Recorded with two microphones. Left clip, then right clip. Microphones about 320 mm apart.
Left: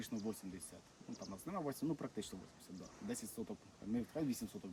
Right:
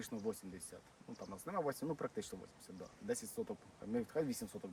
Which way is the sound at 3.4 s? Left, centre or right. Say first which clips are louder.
Right 5 dB; centre.